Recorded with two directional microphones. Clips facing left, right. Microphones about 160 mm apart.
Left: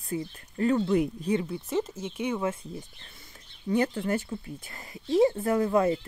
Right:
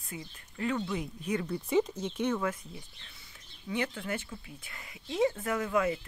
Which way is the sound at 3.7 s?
40° left (ahead or behind).